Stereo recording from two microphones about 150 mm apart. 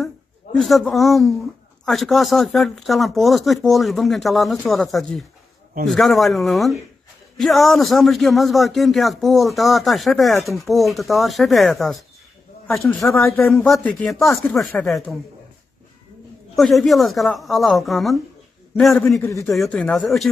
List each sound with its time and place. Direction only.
0.0 s a sound: centre (ahead or behind)
1.9 s speech: centre (ahead or behind)
13.6 s speech: 15° left (ahead or behind)
13.9 s speech: 5° left (ahead or behind)
16.5 s speech: centre (ahead or behind)
19.1 s a man's voice: 20° left (ahead or behind)
19.4 s speech: 5° left (ahead or behind)